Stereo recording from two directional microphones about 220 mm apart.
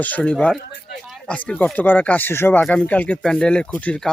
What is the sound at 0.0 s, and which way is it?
Speech, 5° left (ahead or behind).